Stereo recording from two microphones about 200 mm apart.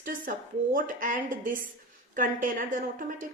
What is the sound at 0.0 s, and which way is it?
A woman's voice, 45° right (ahead or behind).